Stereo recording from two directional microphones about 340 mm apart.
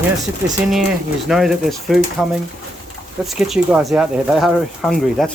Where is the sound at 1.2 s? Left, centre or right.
Centre.